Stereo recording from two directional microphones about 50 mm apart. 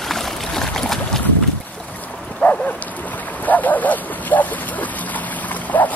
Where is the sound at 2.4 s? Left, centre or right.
Left.